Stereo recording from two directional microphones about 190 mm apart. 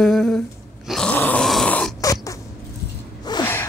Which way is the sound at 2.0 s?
15° left (ahead or behind).